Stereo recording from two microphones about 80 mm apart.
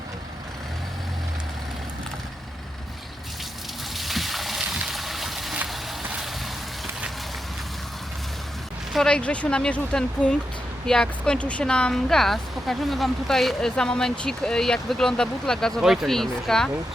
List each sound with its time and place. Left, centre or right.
3.9 s a sound: centre
9.0 s speech: centre
15.8 s speech: centre